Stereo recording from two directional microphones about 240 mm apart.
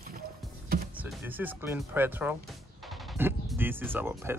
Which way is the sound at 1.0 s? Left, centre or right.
Centre.